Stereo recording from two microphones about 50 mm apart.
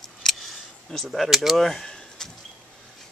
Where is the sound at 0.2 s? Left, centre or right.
Centre.